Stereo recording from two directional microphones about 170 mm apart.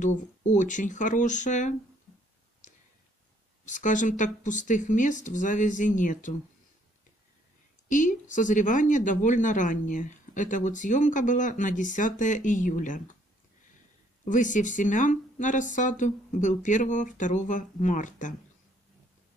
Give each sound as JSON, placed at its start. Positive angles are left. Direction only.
{"t": 0.0, "sound": "speech", "side_deg": 45}
{"t": 3.6, "sound": "speech", "side_deg": 50}
{"t": 7.9, "sound": "speech", "side_deg": 50}
{"t": 14.2, "sound": "speech", "side_deg": 50}